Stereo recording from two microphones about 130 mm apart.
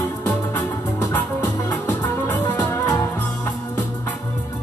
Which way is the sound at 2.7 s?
25° left (ahead or behind).